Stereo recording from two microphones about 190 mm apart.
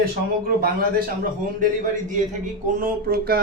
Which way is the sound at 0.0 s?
50° right (ahead or behind).